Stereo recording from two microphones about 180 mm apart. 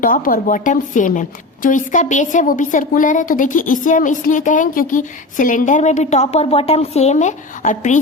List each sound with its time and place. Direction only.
0.0 s a woman's voice: 50° left (ahead or behind)